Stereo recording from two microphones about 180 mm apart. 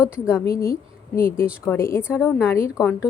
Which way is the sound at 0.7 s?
55° left (ahead or behind).